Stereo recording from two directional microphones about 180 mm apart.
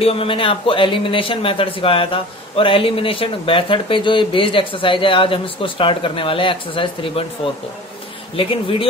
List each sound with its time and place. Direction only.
0.0 s a man's voice: 30° left (ahead or behind)
8.4 s speech: 30° left (ahead or behind)